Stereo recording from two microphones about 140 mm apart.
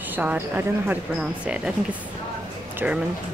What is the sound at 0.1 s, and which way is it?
Speech, 10° right (ahead or behind).